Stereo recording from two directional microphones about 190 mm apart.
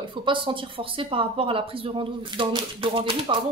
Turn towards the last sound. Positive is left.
turn(degrees=-25)  # may be behind; listen again after turning